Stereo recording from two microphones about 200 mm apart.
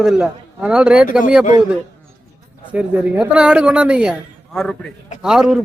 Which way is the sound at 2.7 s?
5° right (ahead or behind).